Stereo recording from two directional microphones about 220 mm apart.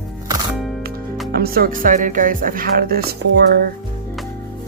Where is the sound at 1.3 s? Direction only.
45° right (ahead or behind).